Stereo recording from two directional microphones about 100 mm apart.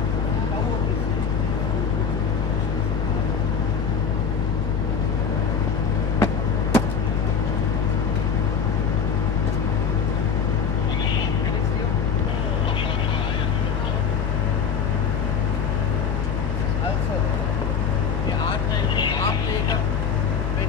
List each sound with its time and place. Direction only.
6.1 s vehicle: 35° left (ahead or behind)
18.9 s vehicle: 50° left (ahead or behind)